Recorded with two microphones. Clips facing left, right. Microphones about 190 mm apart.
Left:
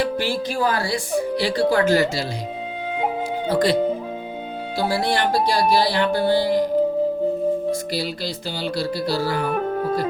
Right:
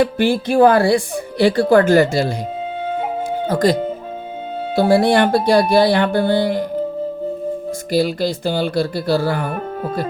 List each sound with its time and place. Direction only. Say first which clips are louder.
0.0 s speech: right 6 dB; 55° right (ahead or behind)
3.4 s speech: right 3 dB; 45° right (ahead or behind)
4.7 s speech: right 9 dB; 55° right (ahead or behind)
7.9 s speech: right 9 dB; 50° right (ahead or behind)